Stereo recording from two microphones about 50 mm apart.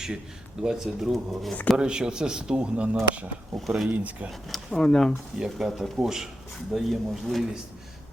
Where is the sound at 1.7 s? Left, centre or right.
Centre.